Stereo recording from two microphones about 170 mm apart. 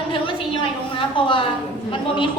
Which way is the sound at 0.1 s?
30° left (ahead or behind).